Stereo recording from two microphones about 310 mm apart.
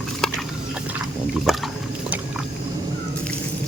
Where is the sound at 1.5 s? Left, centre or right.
Centre.